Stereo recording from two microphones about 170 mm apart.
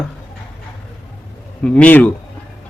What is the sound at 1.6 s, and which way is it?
Speech, 5° left (ahead or behind).